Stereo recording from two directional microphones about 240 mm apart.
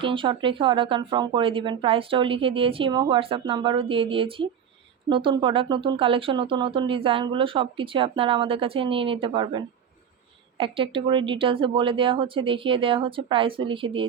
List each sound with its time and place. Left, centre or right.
0.0 s speech: right